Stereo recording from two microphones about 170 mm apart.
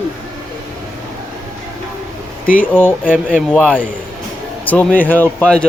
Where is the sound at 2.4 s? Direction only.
55° left (ahead or behind).